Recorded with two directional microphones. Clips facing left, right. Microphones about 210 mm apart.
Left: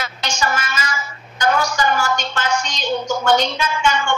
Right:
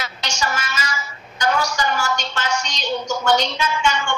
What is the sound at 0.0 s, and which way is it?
A woman's voice, 50° left (ahead or behind).